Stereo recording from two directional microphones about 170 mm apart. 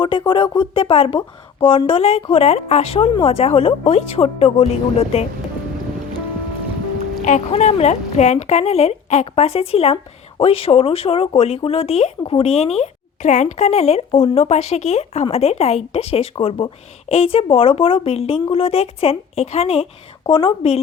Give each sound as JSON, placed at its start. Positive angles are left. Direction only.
{"t": 0.0, "sound": "speech", "side_deg": 30}
{"t": 7.3, "sound": "speech", "side_deg": 40}